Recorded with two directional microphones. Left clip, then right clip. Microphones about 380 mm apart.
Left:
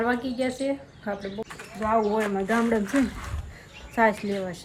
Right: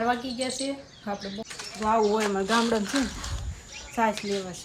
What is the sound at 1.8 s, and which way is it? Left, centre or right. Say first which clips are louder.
Speech: even; centre.